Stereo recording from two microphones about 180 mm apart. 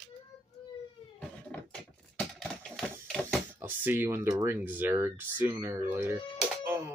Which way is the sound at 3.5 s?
10° right (ahead or behind).